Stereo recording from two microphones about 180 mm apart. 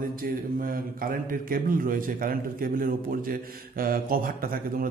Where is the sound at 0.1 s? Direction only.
50° right (ahead or behind).